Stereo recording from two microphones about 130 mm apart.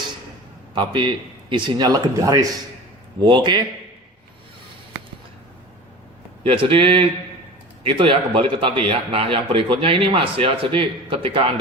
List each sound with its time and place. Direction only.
0.7 s speech: 35° right (ahead or behind)
6.4 s a man's voice: 45° right (ahead or behind)